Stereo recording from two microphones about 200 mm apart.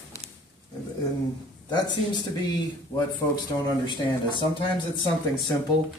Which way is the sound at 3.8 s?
25° left (ahead or behind).